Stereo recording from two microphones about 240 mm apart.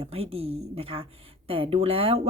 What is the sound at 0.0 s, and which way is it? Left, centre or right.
Speech, right.